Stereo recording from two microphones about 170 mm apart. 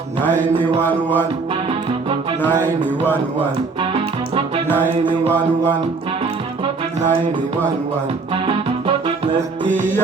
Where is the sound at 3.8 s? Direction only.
30° right (ahead or behind).